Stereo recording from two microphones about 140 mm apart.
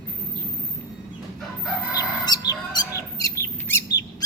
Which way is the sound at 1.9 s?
30° left (ahead or behind).